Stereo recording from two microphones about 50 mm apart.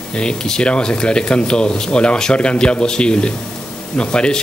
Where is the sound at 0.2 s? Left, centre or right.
Centre.